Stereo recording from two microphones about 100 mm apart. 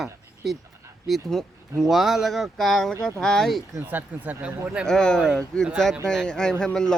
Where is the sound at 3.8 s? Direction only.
15° right (ahead or behind).